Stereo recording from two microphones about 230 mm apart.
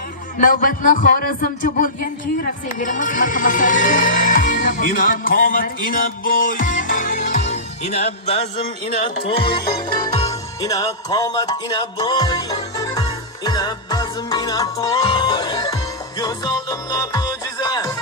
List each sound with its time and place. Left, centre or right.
0.3 s a man's voice: left
2.4 s music: left; by 17.9 s centre